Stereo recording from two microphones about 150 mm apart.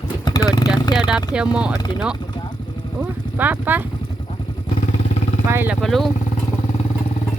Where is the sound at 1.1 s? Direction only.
5° right (ahead or behind).